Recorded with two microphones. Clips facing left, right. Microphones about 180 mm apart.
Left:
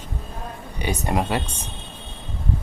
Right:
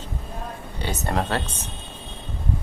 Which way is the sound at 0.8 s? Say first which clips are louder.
Left 2 dB; 15° left (ahead or behind).